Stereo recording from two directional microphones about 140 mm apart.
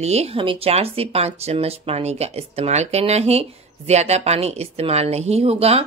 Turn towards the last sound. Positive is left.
turn(degrees=-45)  # may be behind; listen again after turning